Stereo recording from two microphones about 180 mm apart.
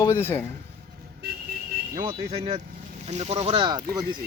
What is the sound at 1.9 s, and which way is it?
Speech, 25° right (ahead or behind).